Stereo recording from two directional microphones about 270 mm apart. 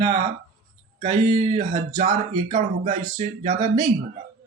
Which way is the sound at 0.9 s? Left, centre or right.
Right.